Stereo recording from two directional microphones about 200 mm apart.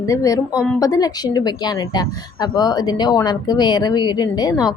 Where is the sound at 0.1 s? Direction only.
15° left (ahead or behind).